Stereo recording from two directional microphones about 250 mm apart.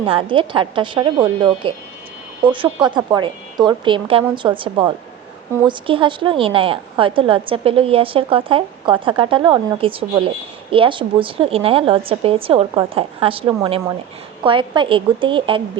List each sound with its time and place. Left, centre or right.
0.0 s a woman's voice: right